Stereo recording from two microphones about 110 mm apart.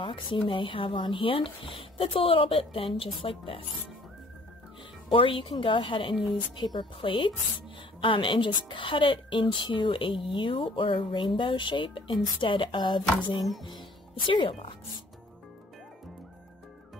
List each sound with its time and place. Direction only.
0.0 s a woman's voice: 50° left (ahead or behind)
5.1 s a woman's voice: 50° left (ahead or behind)